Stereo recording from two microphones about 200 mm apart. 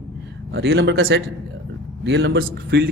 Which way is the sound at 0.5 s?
70° right (ahead or behind).